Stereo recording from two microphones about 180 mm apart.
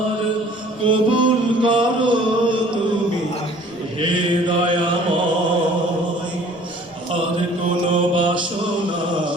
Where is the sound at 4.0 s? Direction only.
25° right (ahead or behind).